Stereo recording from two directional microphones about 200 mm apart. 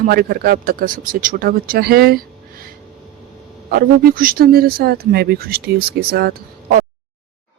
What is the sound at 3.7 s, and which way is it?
Speech, 45° right (ahead or behind).